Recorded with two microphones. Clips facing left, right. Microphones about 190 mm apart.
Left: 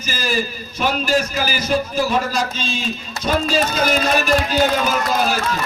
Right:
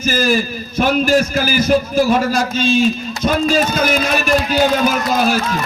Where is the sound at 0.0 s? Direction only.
50° right (ahead or behind).